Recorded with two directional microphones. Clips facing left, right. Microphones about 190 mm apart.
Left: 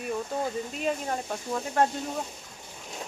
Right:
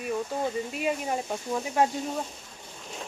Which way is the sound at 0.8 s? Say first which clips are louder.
Right 1 dB; 10° right (ahead or behind).